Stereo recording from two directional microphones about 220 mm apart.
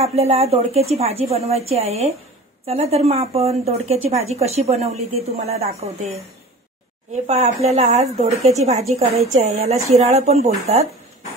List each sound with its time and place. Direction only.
0.0 s a woman's voice: 30° right (ahead or behind)
7.1 s a woman's voice: 30° right (ahead or behind)